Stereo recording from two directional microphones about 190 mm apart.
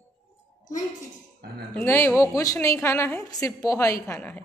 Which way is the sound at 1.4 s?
55° right (ahead or behind).